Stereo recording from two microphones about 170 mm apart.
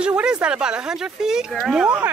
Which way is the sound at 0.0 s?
5° right (ahead or behind).